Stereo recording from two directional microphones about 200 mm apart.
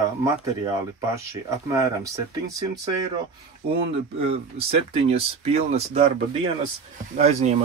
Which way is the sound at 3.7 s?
30° right (ahead or behind).